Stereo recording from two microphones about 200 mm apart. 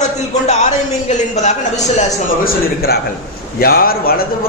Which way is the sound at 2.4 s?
50° left (ahead or behind).